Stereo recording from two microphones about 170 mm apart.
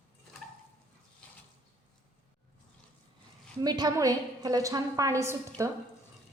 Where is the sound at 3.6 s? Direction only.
25° right (ahead or behind).